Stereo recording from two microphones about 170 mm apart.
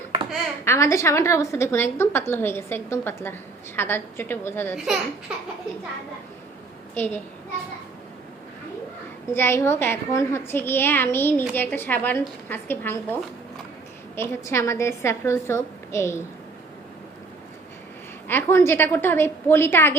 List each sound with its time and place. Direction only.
0.6 s a woman's voice: 15° left (ahead or behind)
6.9 s a woman's voice: 10° left (ahead or behind)
9.3 s a woman's voice: 15° left (ahead or behind)
14.2 s a woman's voice: 15° left (ahead or behind)
18.3 s a woman's voice: 15° left (ahead or behind)